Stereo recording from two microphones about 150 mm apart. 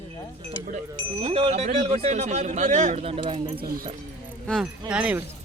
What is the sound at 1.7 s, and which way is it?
Speech, 40° right (ahead or behind).